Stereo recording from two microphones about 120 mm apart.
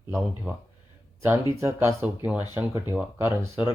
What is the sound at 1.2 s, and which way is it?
Speech, 25° right (ahead or behind).